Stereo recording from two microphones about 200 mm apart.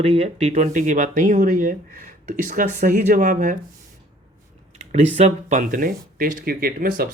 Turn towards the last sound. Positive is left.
turn(degrees=-45)  # may be behind; listen again after turning